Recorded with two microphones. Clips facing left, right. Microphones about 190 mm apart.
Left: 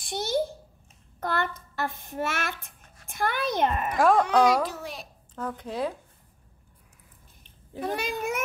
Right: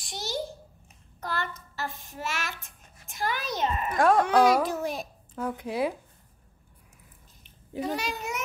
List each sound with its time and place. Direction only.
0.0 s babbling: 55° left (ahead or behind)
1.2 s writing: 55° left (ahead or behind)
4.0 s a child's voice: centre (ahead or behind)
4.6 s a child's voice: 50° right (ahead or behind)
5.3 s speech: 10° right (ahead or behind)
7.8 s a child's voice: 55° left (ahead or behind)